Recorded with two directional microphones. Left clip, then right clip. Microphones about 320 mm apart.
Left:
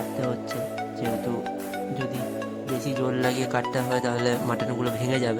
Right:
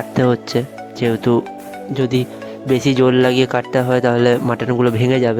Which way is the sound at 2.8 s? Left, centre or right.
Right.